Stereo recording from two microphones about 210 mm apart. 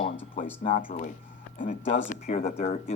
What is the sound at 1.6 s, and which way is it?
Speech, 30° left (ahead or behind).